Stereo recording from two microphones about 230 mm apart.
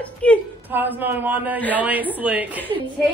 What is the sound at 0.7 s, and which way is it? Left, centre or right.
Speech, centre.